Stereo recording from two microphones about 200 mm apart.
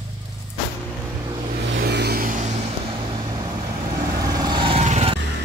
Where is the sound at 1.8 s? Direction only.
55° right (ahead or behind).